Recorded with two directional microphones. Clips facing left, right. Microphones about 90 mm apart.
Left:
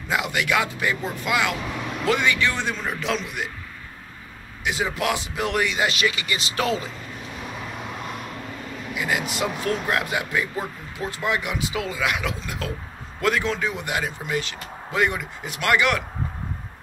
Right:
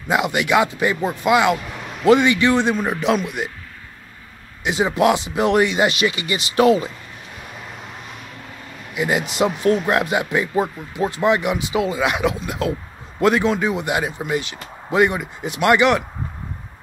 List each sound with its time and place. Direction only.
0.1 s a man's voice: 20° right (ahead or behind)
4.6 s a man's voice: 20° right (ahead or behind)
8.9 s a man's voice: 25° right (ahead or behind)